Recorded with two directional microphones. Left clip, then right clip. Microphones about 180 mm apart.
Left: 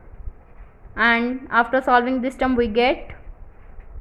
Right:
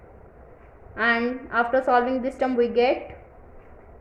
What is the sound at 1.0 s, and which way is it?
A woman's voice, 30° left (ahead or behind).